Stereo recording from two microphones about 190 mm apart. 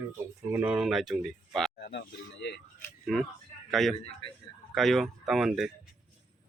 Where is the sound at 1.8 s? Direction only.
60° left (ahead or behind).